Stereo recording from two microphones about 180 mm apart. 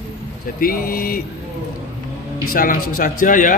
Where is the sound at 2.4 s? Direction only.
50° left (ahead or behind).